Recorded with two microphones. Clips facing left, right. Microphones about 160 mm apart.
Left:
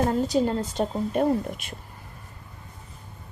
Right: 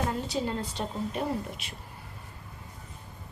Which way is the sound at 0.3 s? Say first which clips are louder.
Left 7 dB; 45° left (ahead or behind).